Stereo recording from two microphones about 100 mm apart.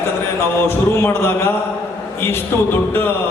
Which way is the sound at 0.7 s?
25° left (ahead or behind).